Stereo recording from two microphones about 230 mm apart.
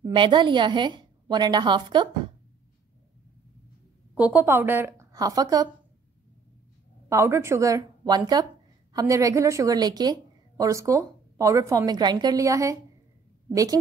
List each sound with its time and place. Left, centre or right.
0.0 s a woman's voice: right
4.1 s a woman's voice: centre
7.1 s a woman's voice: centre